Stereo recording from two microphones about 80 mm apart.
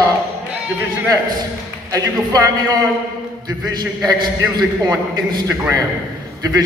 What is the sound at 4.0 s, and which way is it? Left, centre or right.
A man's voice, right.